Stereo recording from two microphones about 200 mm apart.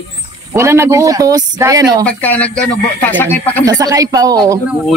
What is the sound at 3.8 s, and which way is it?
Speech, 15° right (ahead or behind).